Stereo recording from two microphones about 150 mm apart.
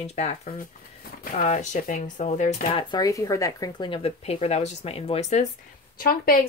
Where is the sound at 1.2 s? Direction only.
55° left (ahead or behind).